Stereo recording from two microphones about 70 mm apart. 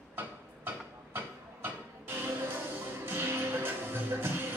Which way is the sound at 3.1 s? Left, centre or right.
Right.